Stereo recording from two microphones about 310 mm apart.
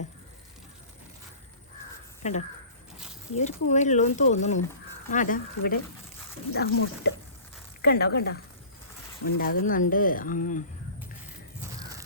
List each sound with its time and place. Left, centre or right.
2.2 s speech: left
11.8 s crow: centre